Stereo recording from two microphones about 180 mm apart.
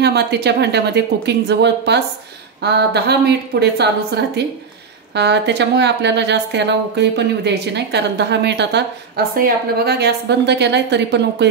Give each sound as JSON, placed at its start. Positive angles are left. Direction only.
{"t": 0.0, "sound": "speech", "side_deg": -65}